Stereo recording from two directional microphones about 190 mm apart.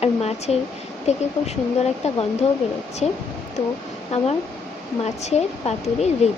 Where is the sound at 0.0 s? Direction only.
35° left (ahead or behind).